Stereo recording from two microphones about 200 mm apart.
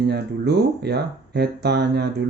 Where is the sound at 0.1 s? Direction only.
55° right (ahead or behind).